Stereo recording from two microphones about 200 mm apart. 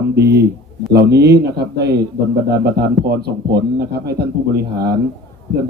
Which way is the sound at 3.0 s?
55° right (ahead or behind).